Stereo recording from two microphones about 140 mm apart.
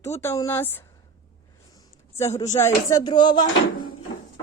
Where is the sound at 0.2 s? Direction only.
20° left (ahead or behind).